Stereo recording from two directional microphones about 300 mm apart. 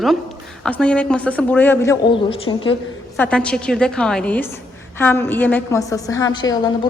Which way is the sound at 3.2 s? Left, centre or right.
Centre.